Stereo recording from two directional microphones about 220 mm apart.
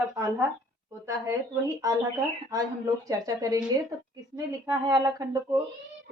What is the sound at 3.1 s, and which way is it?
Speech, 15° right (ahead or behind).